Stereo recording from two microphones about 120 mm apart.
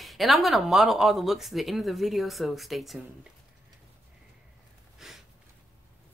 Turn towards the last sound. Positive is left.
turn(degrees=-5)  # may be behind; listen again after turning